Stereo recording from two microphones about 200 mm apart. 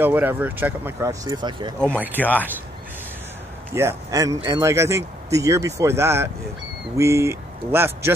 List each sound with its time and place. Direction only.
0.0 s speech: 10° right (ahead or behind)
2.1 s speech: 10° left (ahead or behind)
3.7 s speech: 15° right (ahead or behind)